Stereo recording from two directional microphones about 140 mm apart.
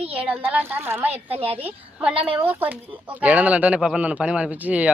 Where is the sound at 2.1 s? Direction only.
40° right (ahead or behind).